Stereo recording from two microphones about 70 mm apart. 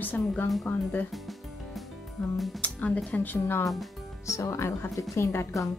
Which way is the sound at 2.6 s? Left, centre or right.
Left.